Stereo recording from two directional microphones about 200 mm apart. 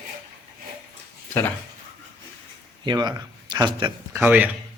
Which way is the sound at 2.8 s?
20° right (ahead or behind).